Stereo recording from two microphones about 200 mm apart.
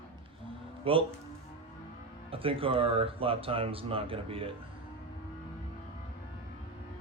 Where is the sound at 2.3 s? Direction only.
25° right (ahead or behind).